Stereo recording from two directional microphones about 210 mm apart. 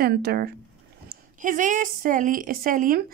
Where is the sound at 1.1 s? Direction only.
40° right (ahead or behind).